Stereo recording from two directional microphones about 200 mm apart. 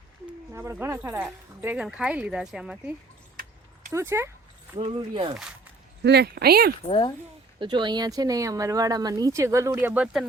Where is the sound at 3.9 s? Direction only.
15° right (ahead or behind).